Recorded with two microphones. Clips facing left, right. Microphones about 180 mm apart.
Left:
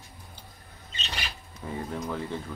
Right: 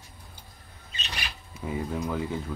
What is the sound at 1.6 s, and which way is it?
Speech, 10° right (ahead or behind).